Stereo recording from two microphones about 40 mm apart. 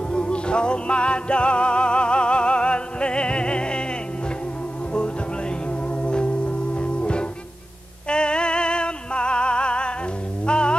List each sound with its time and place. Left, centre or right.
0.1 s music: left
6.0 s music: left